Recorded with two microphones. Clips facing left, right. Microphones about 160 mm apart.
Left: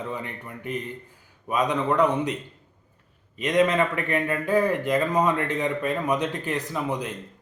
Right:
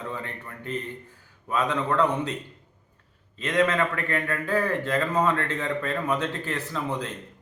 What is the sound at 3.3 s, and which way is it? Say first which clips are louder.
A man's voice: left 3 dB; 15° left (ahead or behind).